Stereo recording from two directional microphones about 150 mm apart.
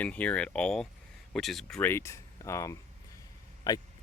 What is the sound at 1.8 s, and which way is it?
Speech, 15° left (ahead or behind).